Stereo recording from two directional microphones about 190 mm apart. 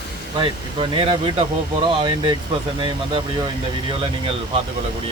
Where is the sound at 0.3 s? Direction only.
30° right (ahead or behind).